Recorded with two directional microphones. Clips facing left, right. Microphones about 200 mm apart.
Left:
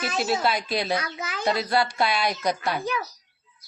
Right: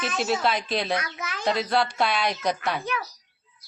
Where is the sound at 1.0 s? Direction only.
30° left (ahead or behind).